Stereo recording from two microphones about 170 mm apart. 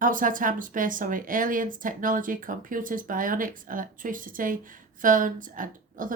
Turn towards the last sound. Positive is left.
turn(degrees=-50)  # may be behind; listen again after turning